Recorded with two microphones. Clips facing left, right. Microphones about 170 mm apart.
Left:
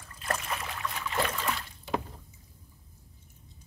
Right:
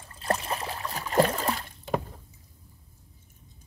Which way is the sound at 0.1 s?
30° right (ahead or behind).